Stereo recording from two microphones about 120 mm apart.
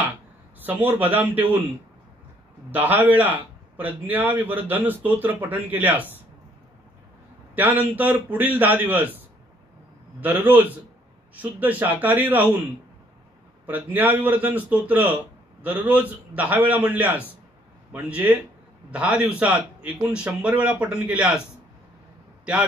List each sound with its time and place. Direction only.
0.7 s a man's voice: 15° right (ahead or behind)
2.7 s a man's voice: 15° right (ahead or behind)
7.5 s a man's voice: 15° right (ahead or behind)
10.2 s a man's voice: 15° right (ahead or behind)
13.7 s a man's voice: 15° right (ahead or behind)
22.4 s a man's voice: 10° right (ahead or behind)